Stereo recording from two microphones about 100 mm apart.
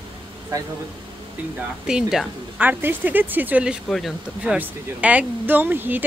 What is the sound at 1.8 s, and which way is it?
Speech, 5° right (ahead or behind).